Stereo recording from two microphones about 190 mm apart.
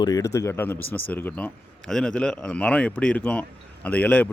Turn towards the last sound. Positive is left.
turn(degrees=10)  # may be behind; listen again after turning